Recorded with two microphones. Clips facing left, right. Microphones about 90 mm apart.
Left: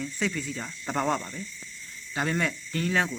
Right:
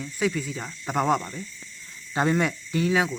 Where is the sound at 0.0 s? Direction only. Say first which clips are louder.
Right 4 dB; 5° right (ahead or behind).